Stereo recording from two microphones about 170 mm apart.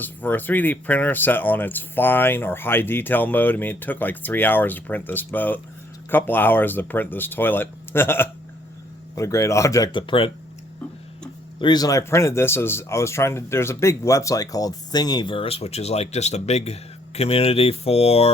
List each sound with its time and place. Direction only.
0.0 s speech: 10° left (ahead or behind); by 10.3 s 30° left (ahead or behind)
11.6 s speech: 25° left (ahead or behind)